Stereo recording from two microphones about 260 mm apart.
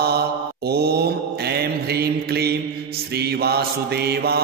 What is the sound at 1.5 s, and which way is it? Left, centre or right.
Mantra, right.